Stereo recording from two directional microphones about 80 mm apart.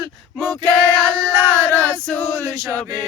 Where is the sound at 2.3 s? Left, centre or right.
Right.